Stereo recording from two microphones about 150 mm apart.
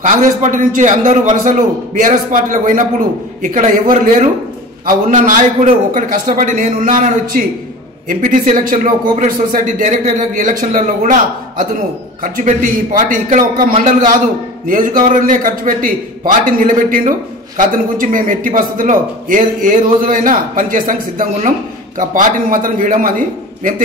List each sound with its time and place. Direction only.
0.0 s speech: 55° right (ahead or behind)